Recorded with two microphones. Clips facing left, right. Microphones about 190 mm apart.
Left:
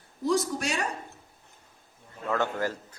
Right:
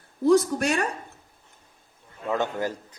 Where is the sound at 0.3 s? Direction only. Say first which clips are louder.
Right 7 dB; 55° right (ahead or behind).